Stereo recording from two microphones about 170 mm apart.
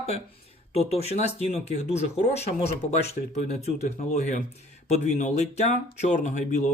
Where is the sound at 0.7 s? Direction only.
35° left (ahead or behind).